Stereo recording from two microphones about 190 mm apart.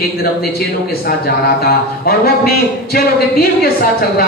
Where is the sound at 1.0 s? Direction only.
55° left (ahead or behind).